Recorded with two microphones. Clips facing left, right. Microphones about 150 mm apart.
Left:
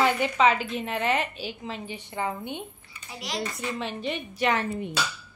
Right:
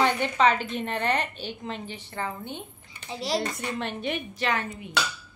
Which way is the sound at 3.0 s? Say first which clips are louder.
Right 6 dB; 30° right (ahead or behind).